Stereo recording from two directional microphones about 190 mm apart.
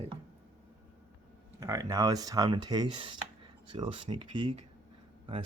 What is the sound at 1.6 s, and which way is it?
Speech, 15° right (ahead or behind).